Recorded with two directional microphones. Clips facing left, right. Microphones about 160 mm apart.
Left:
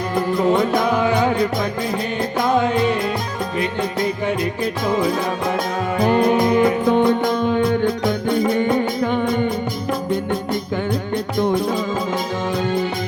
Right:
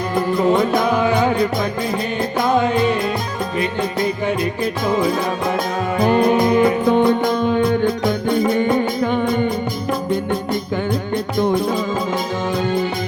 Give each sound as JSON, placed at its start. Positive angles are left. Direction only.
{"t": 0.2, "sound": "music", "side_deg": -10}